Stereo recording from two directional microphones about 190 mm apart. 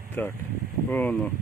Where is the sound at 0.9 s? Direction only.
5° left (ahead or behind).